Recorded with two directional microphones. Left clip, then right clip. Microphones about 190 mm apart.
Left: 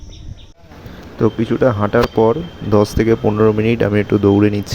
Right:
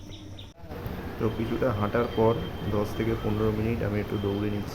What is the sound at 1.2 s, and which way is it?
Speech, 40° left (ahead or behind).